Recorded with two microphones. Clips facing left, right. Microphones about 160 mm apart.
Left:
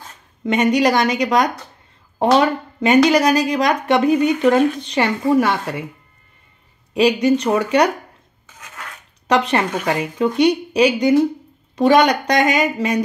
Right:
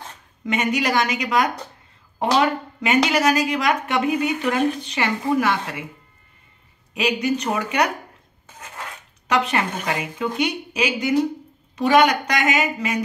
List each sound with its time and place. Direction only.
0.5 s speech: 35° left (ahead or behind)
6.9 s speech: 35° left (ahead or behind)
9.5 s speech: 35° left (ahead or behind)